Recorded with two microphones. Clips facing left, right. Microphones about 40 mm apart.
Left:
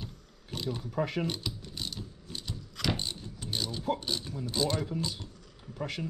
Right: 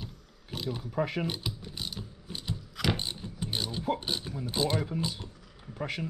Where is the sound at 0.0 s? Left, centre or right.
Centre.